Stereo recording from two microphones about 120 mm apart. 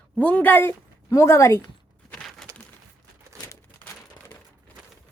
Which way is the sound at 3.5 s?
20° left (ahead or behind).